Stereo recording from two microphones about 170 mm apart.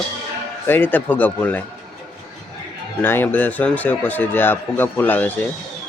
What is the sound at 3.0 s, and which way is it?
A man's voice, 10° left (ahead or behind).